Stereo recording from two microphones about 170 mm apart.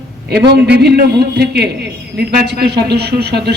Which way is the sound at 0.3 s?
70° right (ahead or behind).